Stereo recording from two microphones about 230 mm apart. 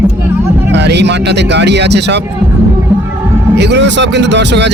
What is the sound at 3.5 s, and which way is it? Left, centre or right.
Speech, right.